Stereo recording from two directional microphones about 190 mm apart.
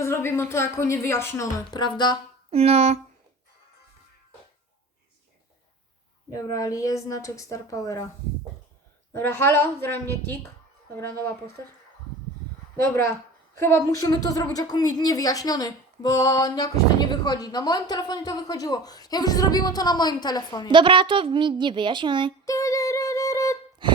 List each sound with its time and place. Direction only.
0.0 s a woman's voice: 15° left (ahead or behind)
2.5 s speech: 30° right (ahead or behind)
6.3 s a woman's voice: 15° left (ahead or behind)
9.1 s a woman's voice: 10° left (ahead or behind)
13.6 s a woman's voice: 15° left (ahead or behind)
20.7 s a woman's voice: 25° right (ahead or behind)
22.4 s a sound: 15° left (ahead or behind)